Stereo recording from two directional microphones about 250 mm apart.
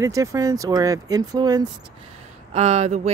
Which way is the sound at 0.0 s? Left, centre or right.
Centre.